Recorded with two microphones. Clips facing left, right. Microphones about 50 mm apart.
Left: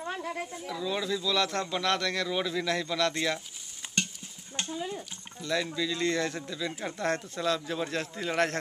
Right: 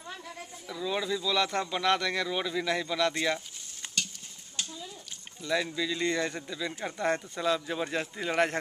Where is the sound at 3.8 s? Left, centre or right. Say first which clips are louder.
Left 3 dB; centre.